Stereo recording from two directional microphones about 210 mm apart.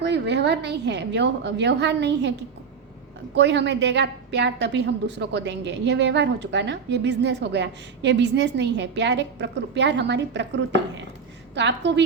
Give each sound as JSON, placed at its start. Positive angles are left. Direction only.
{"t": 0.0, "sound": "a woman's voice", "side_deg": -55}
{"t": 3.3, "sound": "a woman's voice", "side_deg": -55}